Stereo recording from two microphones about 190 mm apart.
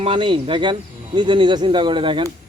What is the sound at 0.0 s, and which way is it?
Speech, 25° right (ahead or behind).